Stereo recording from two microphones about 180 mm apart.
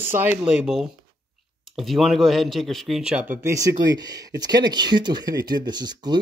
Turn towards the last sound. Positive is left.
turn(degrees=-25)  # may be behind; listen again after turning